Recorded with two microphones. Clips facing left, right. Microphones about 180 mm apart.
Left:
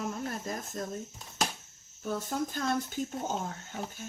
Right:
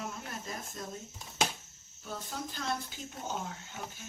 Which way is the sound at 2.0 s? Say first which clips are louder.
Left 8 dB; 45° left (ahead or behind).